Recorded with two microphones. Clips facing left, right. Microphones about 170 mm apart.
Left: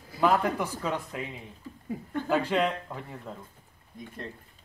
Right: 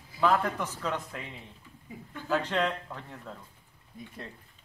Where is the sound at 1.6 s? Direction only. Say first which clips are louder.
Left 10 dB; 40° left (ahead or behind).